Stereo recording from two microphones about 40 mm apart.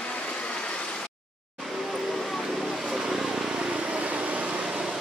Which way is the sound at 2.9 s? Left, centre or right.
Centre.